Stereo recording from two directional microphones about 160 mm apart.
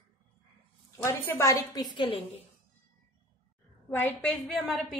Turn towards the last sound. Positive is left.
turn(degrees=0)  # may be behind; listen again after turning